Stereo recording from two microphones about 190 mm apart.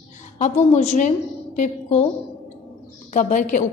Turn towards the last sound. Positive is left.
turn(degrees=40)  # may be behind; listen again after turning